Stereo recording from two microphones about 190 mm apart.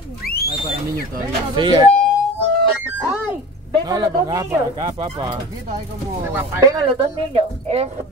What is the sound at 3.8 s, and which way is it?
Speech, 20° right (ahead or behind).